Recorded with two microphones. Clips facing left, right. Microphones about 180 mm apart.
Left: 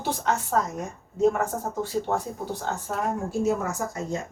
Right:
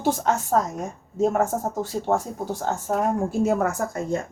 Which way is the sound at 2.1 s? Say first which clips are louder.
Right 7 dB; 45° right (ahead or behind).